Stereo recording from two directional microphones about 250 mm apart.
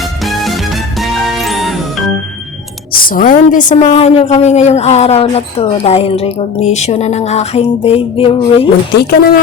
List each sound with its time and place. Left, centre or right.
0.3 s music: centre
2.9 s a woman's voice: left
9.0 s speech: left